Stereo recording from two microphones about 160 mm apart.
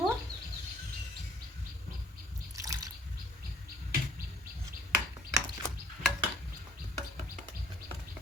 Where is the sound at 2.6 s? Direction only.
20° right (ahead or behind).